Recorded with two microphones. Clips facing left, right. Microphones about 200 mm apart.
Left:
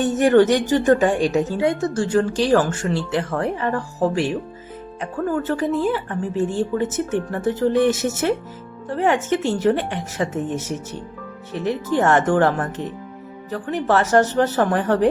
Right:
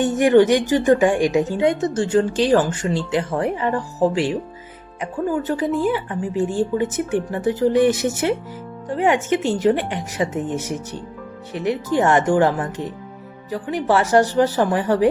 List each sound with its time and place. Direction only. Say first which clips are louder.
0.0 s speech: right 1 dB; 15° right (ahead or behind)